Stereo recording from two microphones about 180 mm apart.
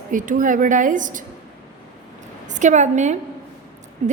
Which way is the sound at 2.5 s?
40° right (ahead or behind).